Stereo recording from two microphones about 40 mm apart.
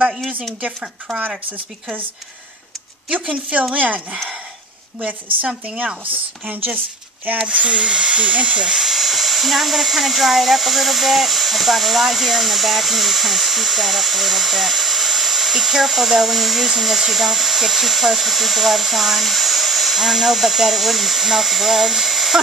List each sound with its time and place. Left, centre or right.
3.1 s speech: right
7.3 s speech: right
8.6 s speech: centre